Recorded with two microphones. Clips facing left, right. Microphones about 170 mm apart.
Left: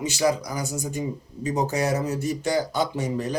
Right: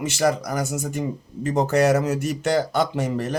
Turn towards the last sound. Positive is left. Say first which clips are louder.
# right 2 dB
turn(degrees=-70)  # may be behind; listen again after turning